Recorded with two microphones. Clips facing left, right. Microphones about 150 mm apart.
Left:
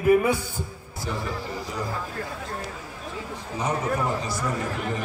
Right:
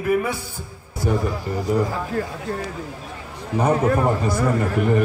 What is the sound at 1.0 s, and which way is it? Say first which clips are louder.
Speech: right 8 dB; 55° right (ahead or behind).